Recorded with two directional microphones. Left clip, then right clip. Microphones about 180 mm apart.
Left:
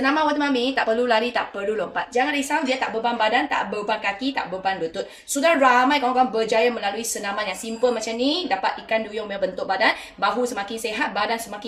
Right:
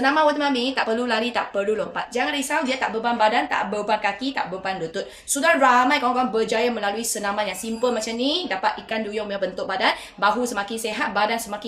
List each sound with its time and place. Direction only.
0.0 s a woman's voice: 25° right (ahead or behind)